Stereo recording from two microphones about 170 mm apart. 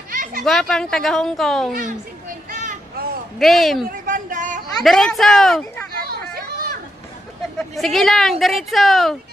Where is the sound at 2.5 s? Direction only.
55° right (ahead or behind).